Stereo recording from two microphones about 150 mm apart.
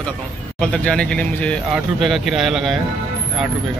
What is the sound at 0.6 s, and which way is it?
Speech, 5° left (ahead or behind).